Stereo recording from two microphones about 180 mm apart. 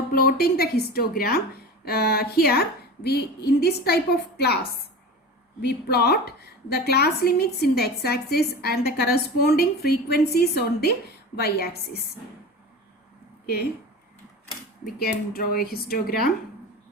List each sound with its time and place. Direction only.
0.1 s a woman's voice: 60° left (ahead or behind)
5.6 s a woman's voice: 65° left (ahead or behind)
14.9 s a woman's voice: 55° left (ahead or behind)